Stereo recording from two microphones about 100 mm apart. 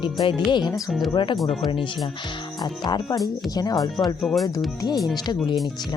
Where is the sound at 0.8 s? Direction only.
Centre (ahead or behind).